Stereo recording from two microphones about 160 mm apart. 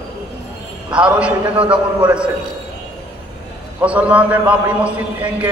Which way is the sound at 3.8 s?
10° right (ahead or behind).